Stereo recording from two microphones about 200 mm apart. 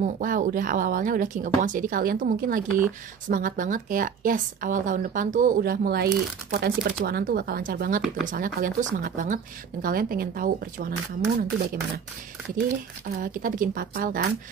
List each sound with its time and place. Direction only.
0.0 s speech: 40° right (ahead or behind)
12.5 s speech: 45° right (ahead or behind)